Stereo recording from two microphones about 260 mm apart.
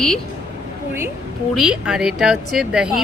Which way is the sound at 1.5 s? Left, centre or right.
Centre.